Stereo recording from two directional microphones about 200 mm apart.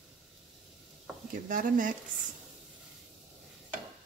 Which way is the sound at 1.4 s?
40° right (ahead or behind).